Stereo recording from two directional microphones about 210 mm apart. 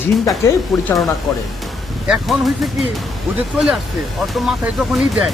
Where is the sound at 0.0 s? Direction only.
Centre (ahead or behind).